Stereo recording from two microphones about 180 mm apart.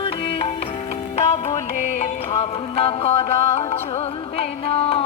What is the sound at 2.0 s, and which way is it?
Music, 35° left (ahead or behind).